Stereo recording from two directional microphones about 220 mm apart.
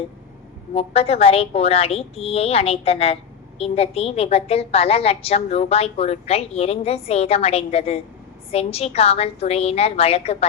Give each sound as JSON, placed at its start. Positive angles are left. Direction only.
{"t": 0.7, "sound": "a woman's voice", "side_deg": 25}